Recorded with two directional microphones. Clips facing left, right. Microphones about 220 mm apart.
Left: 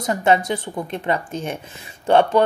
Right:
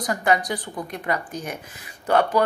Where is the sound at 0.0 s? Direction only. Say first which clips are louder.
Left 4 dB; 25° left (ahead or behind).